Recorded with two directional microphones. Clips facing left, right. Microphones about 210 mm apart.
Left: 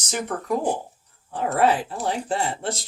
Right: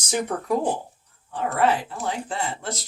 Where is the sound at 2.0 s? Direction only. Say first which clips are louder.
Left 3 dB; 30° left (ahead or behind).